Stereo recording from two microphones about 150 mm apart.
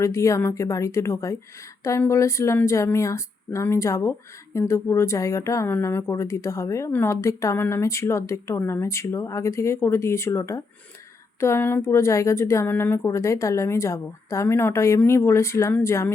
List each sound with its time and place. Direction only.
0.0 s a woman's voice: 20° left (ahead or behind)